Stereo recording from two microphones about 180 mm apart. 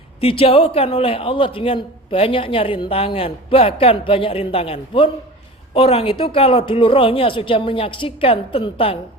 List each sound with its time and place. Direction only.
0.2 s a man's voice: 35° left (ahead or behind)